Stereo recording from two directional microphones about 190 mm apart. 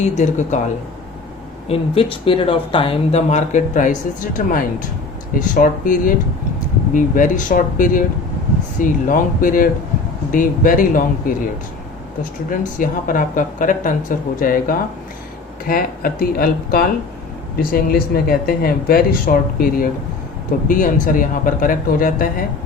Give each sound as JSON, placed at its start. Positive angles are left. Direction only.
{"t": 0.0, "sound": "speech", "side_deg": 40}
{"t": 1.6, "sound": "speech", "side_deg": 30}
{"t": 12.5, "sound": "speech", "side_deg": 45}